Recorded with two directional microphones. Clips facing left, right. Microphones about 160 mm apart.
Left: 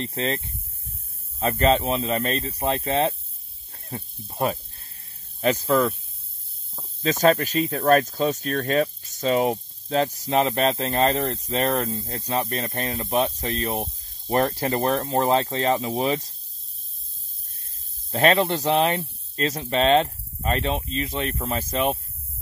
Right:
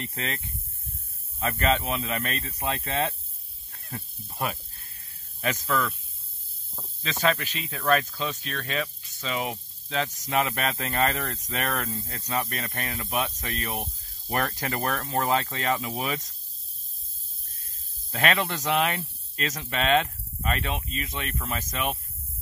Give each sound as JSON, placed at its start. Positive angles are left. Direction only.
{"t": 0.0, "sound": "speech", "side_deg": 30}
{"t": 1.4, "sound": "speech", "side_deg": 30}
{"t": 7.0, "sound": "speech", "side_deg": 40}
{"t": 18.1, "sound": "speech", "side_deg": 30}